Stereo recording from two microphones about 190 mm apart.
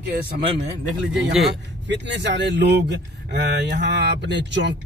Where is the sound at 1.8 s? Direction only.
65° right (ahead or behind).